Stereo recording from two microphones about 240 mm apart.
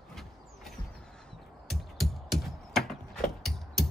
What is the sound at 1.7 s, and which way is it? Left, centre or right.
Music, centre.